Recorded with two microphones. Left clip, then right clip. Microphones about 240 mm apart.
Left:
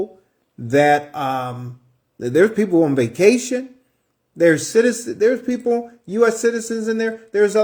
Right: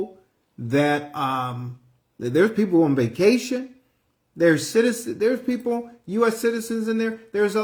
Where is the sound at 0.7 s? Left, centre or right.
Centre.